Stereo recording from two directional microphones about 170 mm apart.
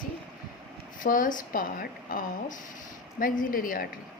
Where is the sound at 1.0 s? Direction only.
50° left (ahead or behind).